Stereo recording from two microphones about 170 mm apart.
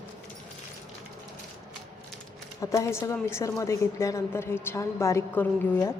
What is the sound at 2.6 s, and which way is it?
A woman's voice, 15° left (ahead or behind).